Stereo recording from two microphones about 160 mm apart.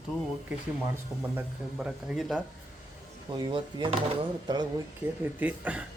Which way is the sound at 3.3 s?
30° right (ahead or behind).